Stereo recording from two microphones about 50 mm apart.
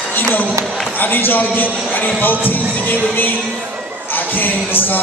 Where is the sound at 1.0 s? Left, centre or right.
Left.